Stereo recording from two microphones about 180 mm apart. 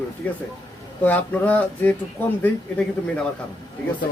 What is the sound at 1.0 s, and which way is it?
Speech, 10° left (ahead or behind).